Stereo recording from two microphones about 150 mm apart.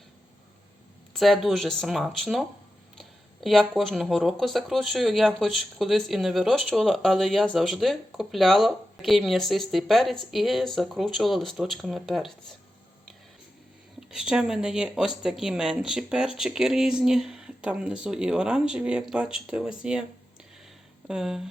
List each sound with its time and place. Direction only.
1.1 s speech: centre (ahead or behind)
14.1 s speech: 5° right (ahead or behind)
21.1 s speech: 5° right (ahead or behind)